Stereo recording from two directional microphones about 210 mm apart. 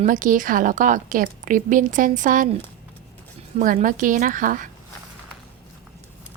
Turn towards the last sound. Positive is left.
turn(degrees=-40)  # may be behind; listen again after turning